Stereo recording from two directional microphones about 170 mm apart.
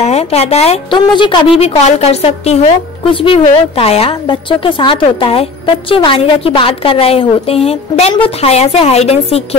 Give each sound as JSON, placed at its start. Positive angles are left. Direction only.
{"t": 0.0, "sound": "a woman's voice", "side_deg": 40}